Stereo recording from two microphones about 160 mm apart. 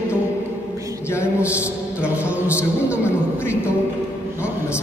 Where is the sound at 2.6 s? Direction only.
15° left (ahead or behind).